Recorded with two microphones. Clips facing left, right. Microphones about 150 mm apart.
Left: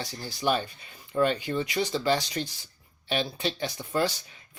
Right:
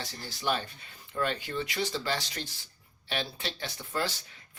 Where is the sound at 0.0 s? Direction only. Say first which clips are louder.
Left 5 dB; 15° left (ahead or behind).